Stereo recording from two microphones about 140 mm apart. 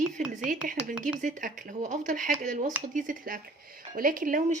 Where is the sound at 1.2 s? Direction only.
70° right (ahead or behind).